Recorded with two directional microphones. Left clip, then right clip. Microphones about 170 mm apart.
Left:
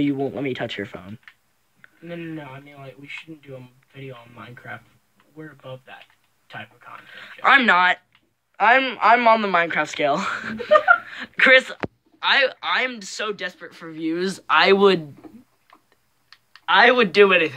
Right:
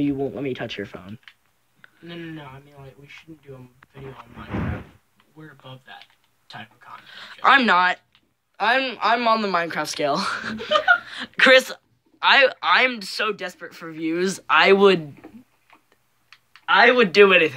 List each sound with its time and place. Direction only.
0.0 s speech: 10° left (ahead or behind)
7.2 s speech: 20° right (ahead or behind)
16.6 s speech: 10° right (ahead or behind)